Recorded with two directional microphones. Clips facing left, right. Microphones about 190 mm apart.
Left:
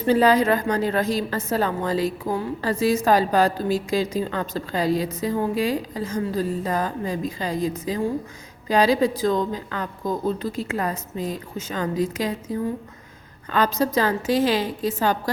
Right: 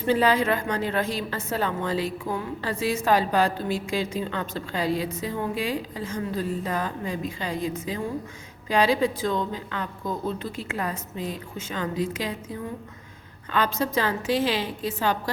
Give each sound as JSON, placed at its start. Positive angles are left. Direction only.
{"t": 0.1, "sound": "a woman's voice", "side_deg": 40}
{"t": 13.5, "sound": "a woman's voice", "side_deg": 40}